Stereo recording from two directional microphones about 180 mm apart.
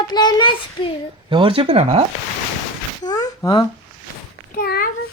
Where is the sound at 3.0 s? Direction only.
20° left (ahead or behind).